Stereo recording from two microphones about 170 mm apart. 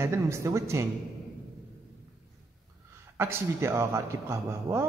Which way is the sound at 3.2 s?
15° right (ahead or behind).